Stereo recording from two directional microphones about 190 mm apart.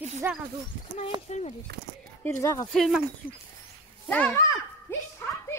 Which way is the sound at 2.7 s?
Centre (ahead or behind).